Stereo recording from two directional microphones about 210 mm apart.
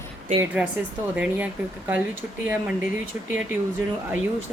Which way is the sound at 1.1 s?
5° right (ahead or behind).